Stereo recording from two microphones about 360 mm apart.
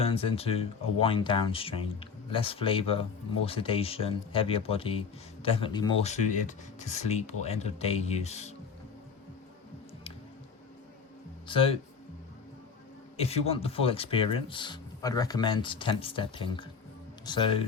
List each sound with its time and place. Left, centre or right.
0.0 s speech: centre
11.4 s speech: centre
13.1 s speech: centre